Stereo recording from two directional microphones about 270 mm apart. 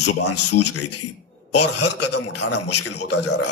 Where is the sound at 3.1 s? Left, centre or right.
Left.